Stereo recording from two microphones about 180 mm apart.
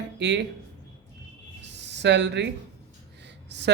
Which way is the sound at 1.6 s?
75° right (ahead or behind).